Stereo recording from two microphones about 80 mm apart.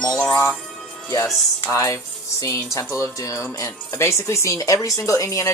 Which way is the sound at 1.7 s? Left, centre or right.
Left.